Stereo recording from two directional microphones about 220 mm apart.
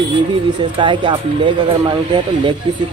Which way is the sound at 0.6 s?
20° right (ahead or behind).